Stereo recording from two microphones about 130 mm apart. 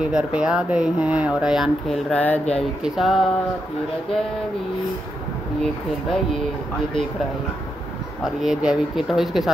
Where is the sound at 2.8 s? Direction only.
Centre (ahead or behind).